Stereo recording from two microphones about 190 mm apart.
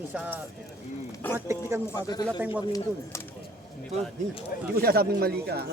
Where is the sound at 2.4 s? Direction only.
10° right (ahead or behind).